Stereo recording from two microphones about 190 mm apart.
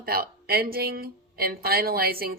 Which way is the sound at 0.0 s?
50° right (ahead or behind).